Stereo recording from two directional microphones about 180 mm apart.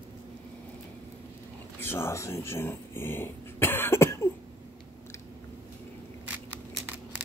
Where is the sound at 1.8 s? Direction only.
15° left (ahead or behind).